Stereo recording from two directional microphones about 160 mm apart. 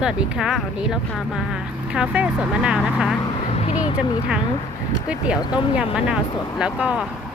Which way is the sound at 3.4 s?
40° left (ahead or behind).